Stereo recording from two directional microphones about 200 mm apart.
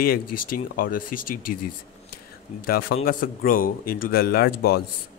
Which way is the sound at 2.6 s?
45° left (ahead or behind).